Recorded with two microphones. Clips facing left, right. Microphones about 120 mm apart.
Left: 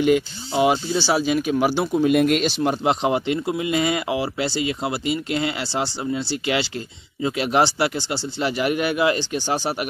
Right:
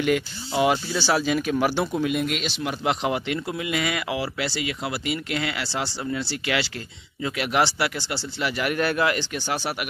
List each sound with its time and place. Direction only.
0.0 s speech: 20° left (ahead or behind)
2.1 s speech: 45° left (ahead or behind)
2.8 s speech: 25° left (ahead or behind)